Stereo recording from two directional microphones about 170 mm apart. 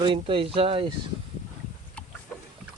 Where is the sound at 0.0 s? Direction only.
30° right (ahead or behind).